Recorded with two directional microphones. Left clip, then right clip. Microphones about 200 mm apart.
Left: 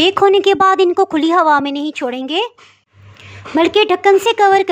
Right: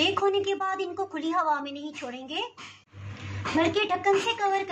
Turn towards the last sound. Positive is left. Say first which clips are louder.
# left 15 dB
turn(degrees=55)  # may be behind; listen again after turning